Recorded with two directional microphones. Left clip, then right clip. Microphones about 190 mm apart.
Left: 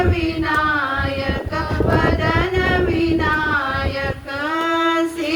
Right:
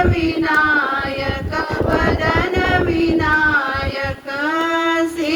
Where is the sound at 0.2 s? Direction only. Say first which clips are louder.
Right 3 dB; 15° right (ahead or behind).